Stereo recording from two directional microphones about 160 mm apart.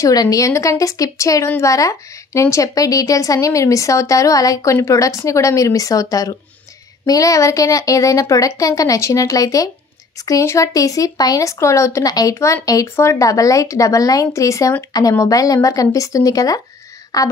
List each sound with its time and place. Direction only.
0.0 s speech: 25° left (ahead or behind)